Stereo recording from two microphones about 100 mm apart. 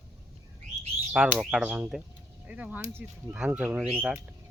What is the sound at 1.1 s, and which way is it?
Speech, 10° right (ahead or behind).